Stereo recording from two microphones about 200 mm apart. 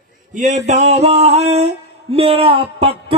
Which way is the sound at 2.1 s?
30° right (ahead or behind).